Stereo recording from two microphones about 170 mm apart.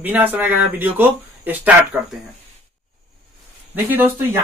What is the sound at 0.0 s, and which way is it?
Speech, 10° right (ahead or behind).